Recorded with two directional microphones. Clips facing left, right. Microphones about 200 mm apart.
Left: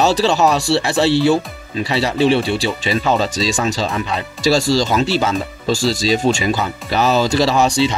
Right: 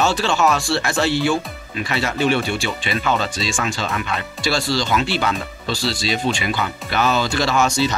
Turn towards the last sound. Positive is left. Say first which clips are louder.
# left 3 dB
turn(degrees=30)  # may be behind; listen again after turning